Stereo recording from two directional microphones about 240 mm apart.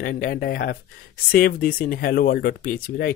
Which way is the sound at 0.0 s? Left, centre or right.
Left.